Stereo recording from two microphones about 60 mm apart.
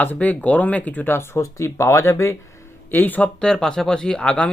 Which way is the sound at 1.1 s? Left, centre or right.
Left.